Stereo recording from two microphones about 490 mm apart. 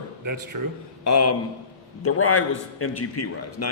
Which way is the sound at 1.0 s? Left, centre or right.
Left.